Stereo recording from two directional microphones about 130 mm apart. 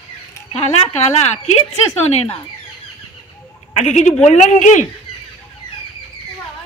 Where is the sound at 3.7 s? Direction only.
65° left (ahead or behind).